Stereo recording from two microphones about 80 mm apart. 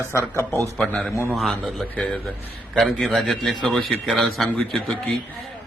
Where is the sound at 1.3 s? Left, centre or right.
Centre.